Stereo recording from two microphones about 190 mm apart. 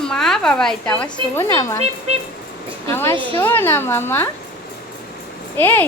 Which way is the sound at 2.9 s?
15° left (ahead or behind).